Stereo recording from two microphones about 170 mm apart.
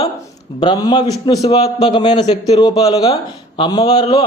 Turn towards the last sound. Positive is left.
turn(degrees=25)  # may be behind; listen again after turning